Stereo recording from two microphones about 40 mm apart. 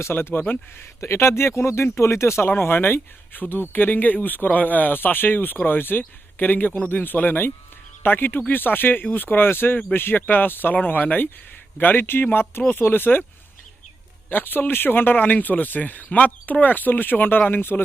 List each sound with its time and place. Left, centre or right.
0.0 s speech: left
0.8 s speech: left
2.6 s speech: left
6.4 s speech: left
10.8 s speech: left
11.8 s speech: left
14.3 s speech: left
17.5 s speech: left